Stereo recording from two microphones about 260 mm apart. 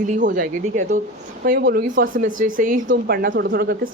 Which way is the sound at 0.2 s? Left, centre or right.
Right.